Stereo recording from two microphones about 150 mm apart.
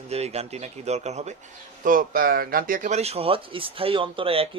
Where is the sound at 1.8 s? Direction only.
65° right (ahead or behind).